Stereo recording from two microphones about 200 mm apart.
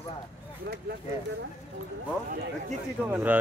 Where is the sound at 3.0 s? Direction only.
10° right (ahead or behind).